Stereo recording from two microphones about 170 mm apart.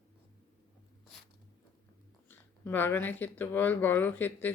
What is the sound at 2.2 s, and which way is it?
Speech, 10° left (ahead or behind).